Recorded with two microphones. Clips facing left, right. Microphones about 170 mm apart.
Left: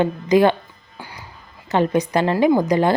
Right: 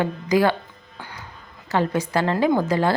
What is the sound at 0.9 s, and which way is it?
Music, 10° left (ahead or behind).